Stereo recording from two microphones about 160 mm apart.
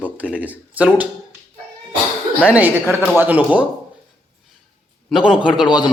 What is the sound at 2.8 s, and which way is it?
Speech, 15° left (ahead or behind).